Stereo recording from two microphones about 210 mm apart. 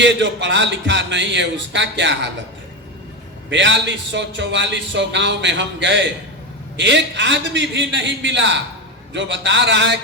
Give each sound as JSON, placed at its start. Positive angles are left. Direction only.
{"t": 0.0, "sound": "speech", "side_deg": -60}
{"t": 3.5, "sound": "speech", "side_deg": -60}